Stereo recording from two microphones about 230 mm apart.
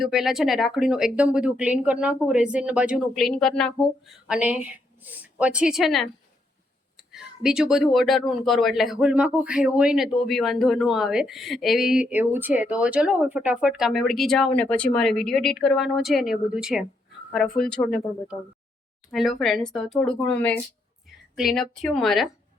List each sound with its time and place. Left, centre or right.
0.0 s speech: centre
17.8 s speech: left
19.1 s speech: centre